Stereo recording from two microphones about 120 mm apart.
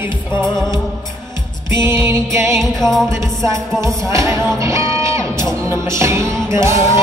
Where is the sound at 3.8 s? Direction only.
25° right (ahead or behind).